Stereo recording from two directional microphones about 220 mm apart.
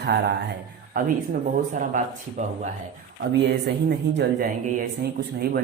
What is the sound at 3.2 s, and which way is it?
Speech, 50° right (ahead or behind).